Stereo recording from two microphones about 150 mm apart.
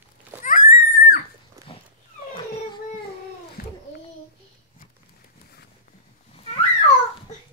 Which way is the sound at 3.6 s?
90° left.